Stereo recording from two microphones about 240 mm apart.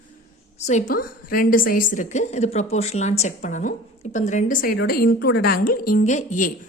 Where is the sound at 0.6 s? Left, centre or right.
Left.